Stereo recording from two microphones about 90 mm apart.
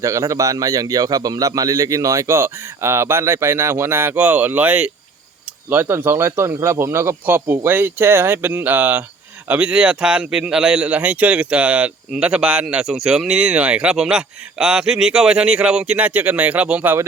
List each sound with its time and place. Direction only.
0.0 s a man's voice: 35° right (ahead or behind); by 17.0 s 15° right (ahead or behind)